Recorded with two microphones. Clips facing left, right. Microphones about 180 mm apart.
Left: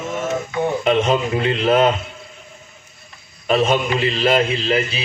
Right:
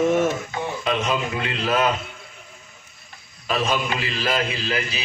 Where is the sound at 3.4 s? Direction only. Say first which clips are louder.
Left 6 dB; 25° left (ahead or behind).